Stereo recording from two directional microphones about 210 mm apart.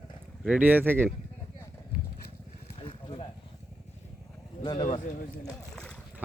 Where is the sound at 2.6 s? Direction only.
25° left (ahead or behind).